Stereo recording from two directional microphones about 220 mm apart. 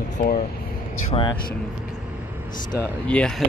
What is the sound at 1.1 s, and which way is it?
Speech, 25° left (ahead or behind).